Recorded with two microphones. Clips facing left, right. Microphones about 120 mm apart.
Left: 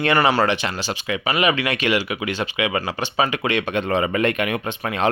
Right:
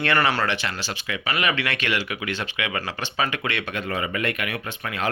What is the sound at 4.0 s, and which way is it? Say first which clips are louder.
Speech: left 6 dB; 30° left (ahead or behind).